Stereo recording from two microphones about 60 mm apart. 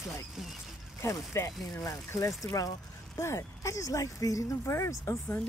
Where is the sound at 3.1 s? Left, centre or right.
Left.